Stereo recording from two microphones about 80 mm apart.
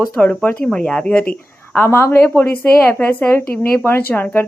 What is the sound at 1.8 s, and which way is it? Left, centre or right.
Speech, left.